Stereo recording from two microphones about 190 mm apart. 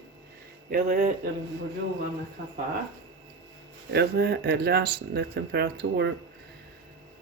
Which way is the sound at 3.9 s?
60° right (ahead or behind).